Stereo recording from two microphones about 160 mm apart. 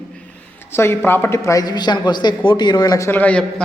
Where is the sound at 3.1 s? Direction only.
10° left (ahead or behind).